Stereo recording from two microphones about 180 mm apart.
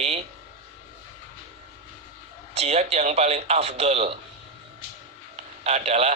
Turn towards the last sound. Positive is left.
turn(degrees=-35)  # may be behind; listen again after turning